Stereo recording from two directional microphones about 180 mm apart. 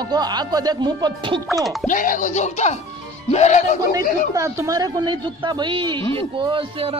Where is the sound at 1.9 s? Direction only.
45° left (ahead or behind).